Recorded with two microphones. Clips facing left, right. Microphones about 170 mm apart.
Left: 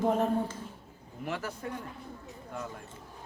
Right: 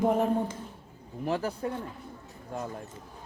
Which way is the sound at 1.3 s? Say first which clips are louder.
Right 6 dB; 35° right (ahead or behind).